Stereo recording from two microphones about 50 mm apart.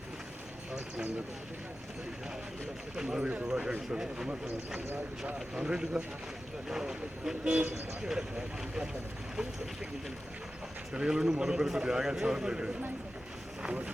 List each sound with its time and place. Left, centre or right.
2.9 s a man's voice: centre
10.9 s a man's voice: centre